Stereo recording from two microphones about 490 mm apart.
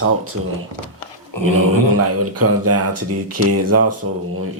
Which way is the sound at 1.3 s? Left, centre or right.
Left.